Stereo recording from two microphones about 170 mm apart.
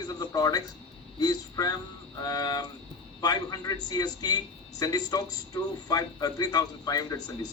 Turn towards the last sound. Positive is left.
turn(degrees=20)  # may be behind; listen again after turning